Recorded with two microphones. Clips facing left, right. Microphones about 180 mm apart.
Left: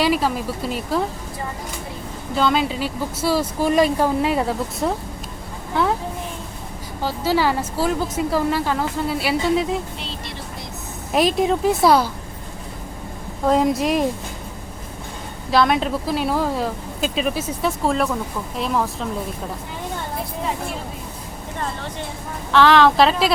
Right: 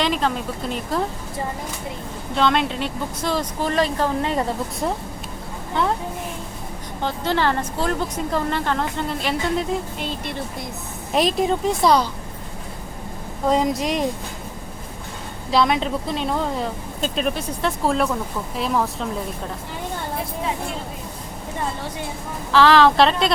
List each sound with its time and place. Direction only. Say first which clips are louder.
0.0 s speech: left 2 dB; 5° left (ahead or behind)
2.3 s speech: even; centre (ahead or behind)
7.0 s speech: left 2 dB; 5° left (ahead or behind)
11.1 s speech: left 2 dB; centre (ahead or behind)
13.5 s speech: left 3 dB; centre (ahead or behind)
15.4 s speech: left 1 dB; centre (ahead or behind)
22.5 s speech: even; centre (ahead or behind)